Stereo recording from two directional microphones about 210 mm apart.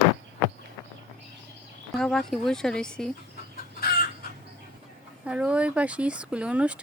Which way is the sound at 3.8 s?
45° left (ahead or behind).